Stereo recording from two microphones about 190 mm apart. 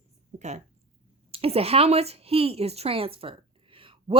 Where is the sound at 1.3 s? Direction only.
30° right (ahead or behind).